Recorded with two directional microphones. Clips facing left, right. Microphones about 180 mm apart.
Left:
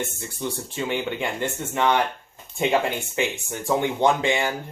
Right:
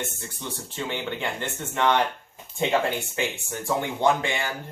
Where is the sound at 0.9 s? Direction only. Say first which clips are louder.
Left 3 dB; 15° left (ahead or behind).